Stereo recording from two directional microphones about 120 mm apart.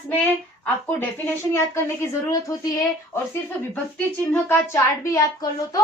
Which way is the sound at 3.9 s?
15° left (ahead or behind).